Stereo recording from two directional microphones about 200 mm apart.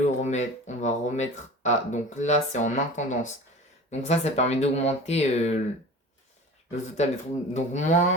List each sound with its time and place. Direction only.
0.0 s speech: 35° left (ahead or behind)
6.7 s speech: 35° left (ahead or behind)